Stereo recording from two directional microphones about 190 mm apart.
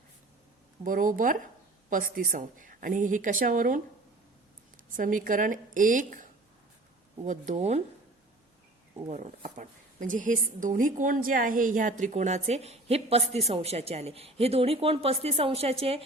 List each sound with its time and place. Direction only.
0.9 s a woman's voice: 45° right (ahead or behind)
4.9 s a woman's voice: 45° right (ahead or behind)
7.3 s speech: 40° right (ahead or behind)
9.0 s a woman's voice: 40° right (ahead or behind)